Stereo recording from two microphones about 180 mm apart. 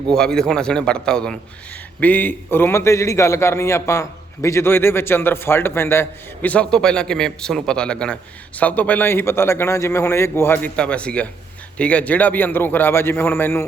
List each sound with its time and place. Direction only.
0.2 s a man's voice: 5° left (ahead or behind)